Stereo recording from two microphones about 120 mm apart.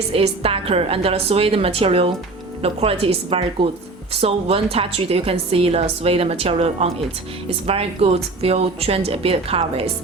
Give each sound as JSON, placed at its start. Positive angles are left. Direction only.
{"t": 0.1, "sound": "a woman's voice", "side_deg": -55}